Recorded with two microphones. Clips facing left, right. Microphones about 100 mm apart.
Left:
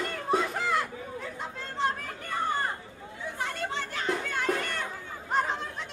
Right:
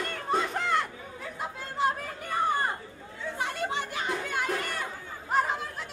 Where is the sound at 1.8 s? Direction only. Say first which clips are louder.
Right 2 dB; 10° right (ahead or behind).